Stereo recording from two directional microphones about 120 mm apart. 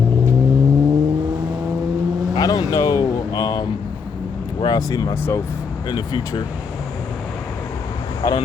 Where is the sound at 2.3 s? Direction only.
30° left (ahead or behind).